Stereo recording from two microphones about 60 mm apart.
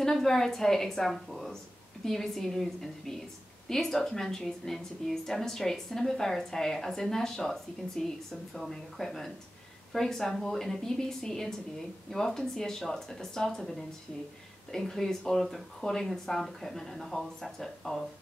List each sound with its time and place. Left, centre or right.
0.0 s a woman's voice: centre